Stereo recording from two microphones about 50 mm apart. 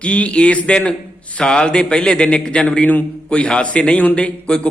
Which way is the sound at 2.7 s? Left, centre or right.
Left.